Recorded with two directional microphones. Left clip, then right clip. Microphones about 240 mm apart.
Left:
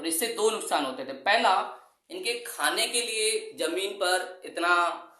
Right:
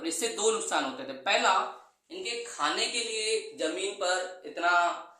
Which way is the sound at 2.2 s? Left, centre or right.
Left.